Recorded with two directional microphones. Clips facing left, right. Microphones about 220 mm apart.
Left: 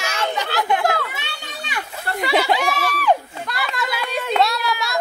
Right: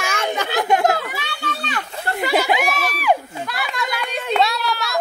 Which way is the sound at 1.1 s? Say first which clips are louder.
Right 5 dB; 15° left (ahead or behind).